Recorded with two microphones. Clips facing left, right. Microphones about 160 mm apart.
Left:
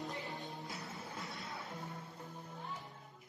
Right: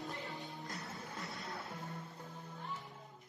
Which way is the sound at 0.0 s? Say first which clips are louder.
Left 1 dB; 20° left (ahead or behind).